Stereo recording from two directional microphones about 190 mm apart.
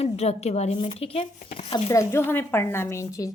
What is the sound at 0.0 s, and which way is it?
Speech, 35° left (ahead or behind).